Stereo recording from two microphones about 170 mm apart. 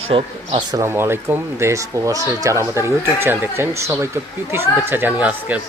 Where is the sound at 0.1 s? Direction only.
30° right (ahead or behind).